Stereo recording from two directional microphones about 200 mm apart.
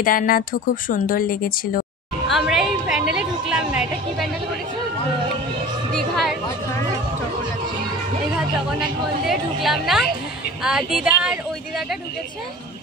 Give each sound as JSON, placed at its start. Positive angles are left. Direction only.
{"t": 0.0, "sound": "speech", "side_deg": 45}
{"t": 2.2, "sound": "a sound", "side_deg": 0}
{"t": 5.9, "sound": "music", "side_deg": 0}
{"t": 9.3, "sound": "a woman's voice", "side_deg": 0}